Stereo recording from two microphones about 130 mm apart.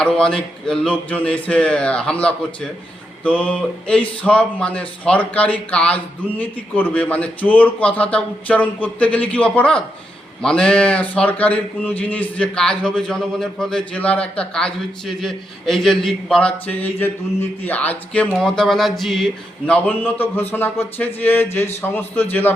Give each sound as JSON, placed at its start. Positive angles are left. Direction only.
{"t": 0.0, "sound": "speech", "side_deg": 5}